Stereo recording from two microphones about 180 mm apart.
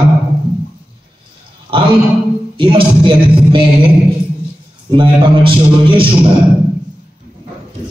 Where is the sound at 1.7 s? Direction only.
30° right (ahead or behind).